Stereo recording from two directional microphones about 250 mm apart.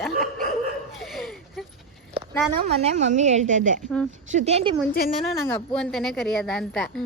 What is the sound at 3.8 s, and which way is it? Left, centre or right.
Speech, centre.